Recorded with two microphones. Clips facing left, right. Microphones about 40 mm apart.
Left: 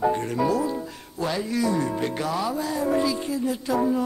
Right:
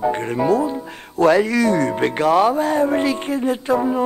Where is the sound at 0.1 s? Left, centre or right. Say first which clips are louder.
Right 5 dB; right.